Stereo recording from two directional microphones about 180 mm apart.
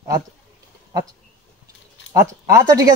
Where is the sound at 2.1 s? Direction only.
15° right (ahead or behind).